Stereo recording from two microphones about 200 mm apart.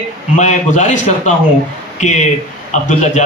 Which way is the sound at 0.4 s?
35° left (ahead or behind).